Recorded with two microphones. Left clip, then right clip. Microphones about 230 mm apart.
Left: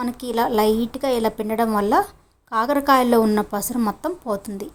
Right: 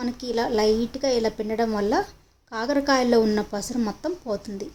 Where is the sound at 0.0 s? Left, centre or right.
Centre.